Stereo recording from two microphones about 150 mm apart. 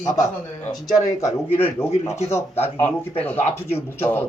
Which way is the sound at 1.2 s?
15° left (ahead or behind).